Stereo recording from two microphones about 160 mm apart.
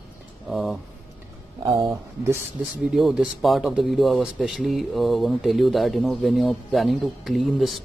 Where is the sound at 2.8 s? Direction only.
Centre (ahead or behind).